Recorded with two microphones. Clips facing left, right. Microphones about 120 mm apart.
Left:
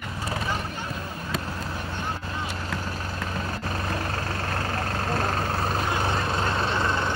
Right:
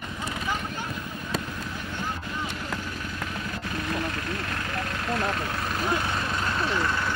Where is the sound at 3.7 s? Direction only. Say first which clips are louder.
Right 2 dB; 40° left (ahead or behind).